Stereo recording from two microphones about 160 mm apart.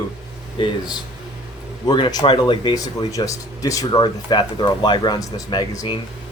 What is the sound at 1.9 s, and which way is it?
Speech, 25° left (ahead or behind).